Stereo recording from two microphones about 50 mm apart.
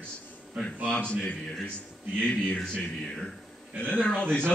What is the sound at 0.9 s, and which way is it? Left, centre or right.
Speech, left.